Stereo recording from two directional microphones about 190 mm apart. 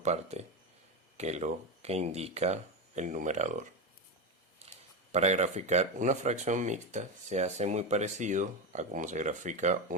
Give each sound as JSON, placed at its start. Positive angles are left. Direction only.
{"t": 0.0, "sound": "speech", "side_deg": -35}
{"t": 4.6, "sound": "a sound", "side_deg": -35}
{"t": 5.1, "sound": "speech", "side_deg": -35}